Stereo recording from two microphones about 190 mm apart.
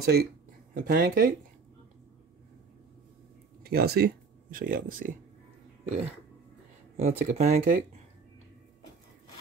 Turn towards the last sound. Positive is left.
turn(degrees=-40)  # may be behind; listen again after turning